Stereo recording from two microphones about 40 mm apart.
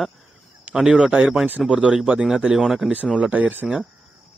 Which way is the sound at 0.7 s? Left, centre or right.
Centre.